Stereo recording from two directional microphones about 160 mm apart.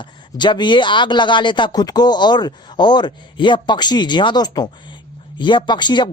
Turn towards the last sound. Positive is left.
turn(degrees=30)  # may be behind; listen again after turning